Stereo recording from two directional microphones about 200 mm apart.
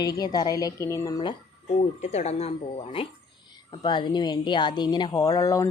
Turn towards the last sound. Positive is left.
turn(degrees=15)  # may be behind; listen again after turning